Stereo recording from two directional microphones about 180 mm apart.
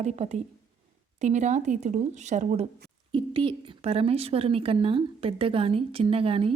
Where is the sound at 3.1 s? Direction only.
30° right (ahead or behind).